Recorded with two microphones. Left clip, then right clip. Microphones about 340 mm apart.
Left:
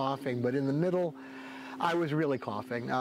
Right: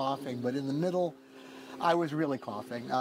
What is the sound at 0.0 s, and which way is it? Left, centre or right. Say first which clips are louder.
A man's voice: left 1 dB; left.